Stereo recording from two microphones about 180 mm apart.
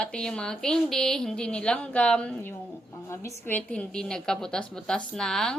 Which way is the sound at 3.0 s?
15° left (ahead or behind).